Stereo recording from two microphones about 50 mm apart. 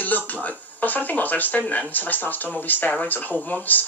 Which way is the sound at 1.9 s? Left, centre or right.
Left.